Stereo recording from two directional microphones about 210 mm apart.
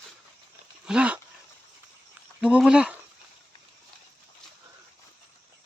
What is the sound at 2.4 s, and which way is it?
Speech, 5° right (ahead or behind).